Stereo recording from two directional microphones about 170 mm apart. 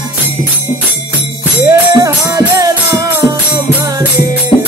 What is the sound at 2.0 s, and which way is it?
Music, 20° right (ahead or behind).